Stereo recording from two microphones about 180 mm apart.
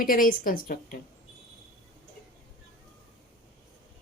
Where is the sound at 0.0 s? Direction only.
50° left (ahead or behind).